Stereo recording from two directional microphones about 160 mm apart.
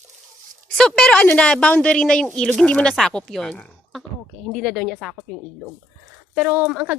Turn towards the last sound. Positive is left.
turn(degrees=-10)  # may be behind; listen again after turning